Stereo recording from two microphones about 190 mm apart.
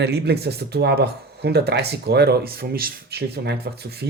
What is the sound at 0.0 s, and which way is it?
Speech, 60° right (ahead or behind).